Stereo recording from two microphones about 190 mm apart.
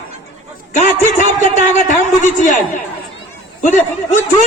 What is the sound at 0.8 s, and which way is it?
Speech, 40° left (ahead or behind).